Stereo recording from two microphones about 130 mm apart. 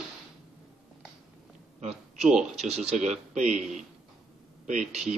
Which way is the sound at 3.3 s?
65° right (ahead or behind).